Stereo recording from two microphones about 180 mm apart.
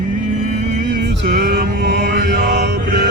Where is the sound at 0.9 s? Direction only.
70° right (ahead or behind).